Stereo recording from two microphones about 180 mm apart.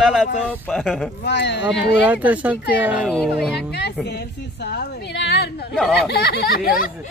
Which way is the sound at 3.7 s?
70° left (ahead or behind).